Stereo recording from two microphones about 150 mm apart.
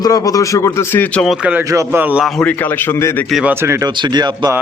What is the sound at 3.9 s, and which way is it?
Speech, 30° right (ahead or behind).